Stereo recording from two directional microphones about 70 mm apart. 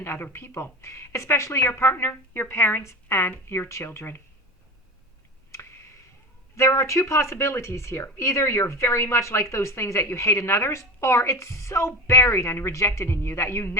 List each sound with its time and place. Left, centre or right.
0.0 s a woman's voice: left
6.6 s a woman's voice: left